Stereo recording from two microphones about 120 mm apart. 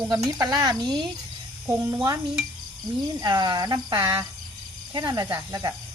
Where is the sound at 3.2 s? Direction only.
35° right (ahead or behind).